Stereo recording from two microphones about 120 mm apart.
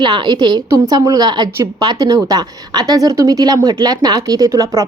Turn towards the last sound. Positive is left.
turn(degrees=-25)  # may be behind; listen again after turning